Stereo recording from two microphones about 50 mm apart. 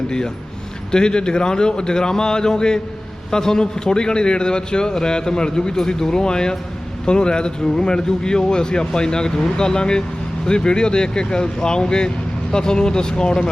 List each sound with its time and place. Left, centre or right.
0.9 s a man's voice: centre